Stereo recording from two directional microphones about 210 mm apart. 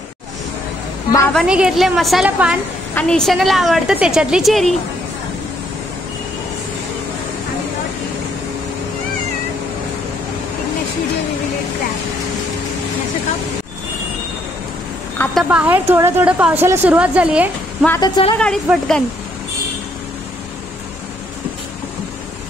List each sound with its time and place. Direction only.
1.3 s a woman's voice: 5° right (ahead or behind)
2.9 s a woman's voice: 5° left (ahead or behind)
15.1 s speech: centre (ahead or behind)
17.8 s a woman's voice: 15° left (ahead or behind)
18.4 s a woman's voice: 5° left (ahead or behind)